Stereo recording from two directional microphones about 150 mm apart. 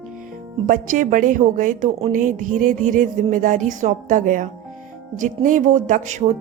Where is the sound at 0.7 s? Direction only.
65° right (ahead or behind).